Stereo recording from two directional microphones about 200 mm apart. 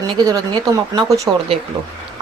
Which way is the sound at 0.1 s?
20° right (ahead or behind).